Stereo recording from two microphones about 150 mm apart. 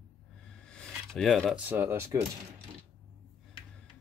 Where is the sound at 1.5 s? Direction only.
10° right (ahead or behind).